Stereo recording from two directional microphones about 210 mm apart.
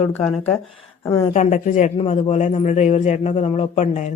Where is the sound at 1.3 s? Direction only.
35° left (ahead or behind).